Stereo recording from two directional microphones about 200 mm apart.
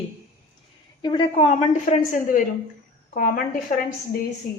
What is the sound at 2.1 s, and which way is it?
A woman's voice, 40° left (ahead or behind).